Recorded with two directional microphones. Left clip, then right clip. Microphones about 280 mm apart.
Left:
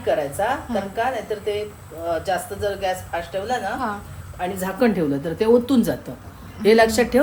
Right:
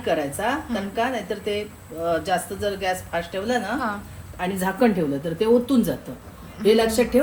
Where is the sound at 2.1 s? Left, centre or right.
Right.